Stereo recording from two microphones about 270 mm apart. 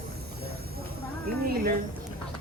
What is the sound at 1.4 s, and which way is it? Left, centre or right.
Music, right.